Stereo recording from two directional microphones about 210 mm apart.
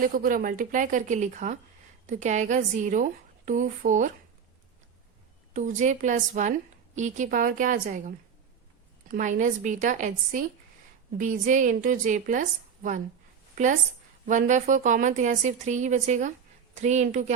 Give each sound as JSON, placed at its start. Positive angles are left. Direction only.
{"t": 0.0, "sound": "a woman's voice", "side_deg": -40}
{"t": 5.5, "sound": "a woman's voice", "side_deg": -35}
{"t": 14.3, "sound": "a woman's voice", "side_deg": -35}